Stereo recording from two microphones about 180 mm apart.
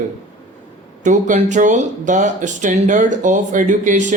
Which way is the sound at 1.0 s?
45° right (ahead or behind).